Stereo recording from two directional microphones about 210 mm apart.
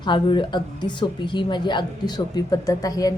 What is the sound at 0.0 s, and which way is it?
A woman's voice, 20° left (ahead or behind).